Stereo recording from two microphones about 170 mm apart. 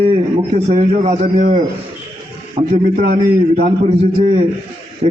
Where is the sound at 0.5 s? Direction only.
40° right (ahead or behind).